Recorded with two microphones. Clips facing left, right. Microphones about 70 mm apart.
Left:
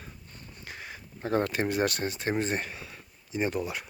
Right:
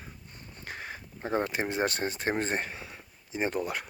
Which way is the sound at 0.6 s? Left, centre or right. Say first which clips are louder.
Right 3 dB; right.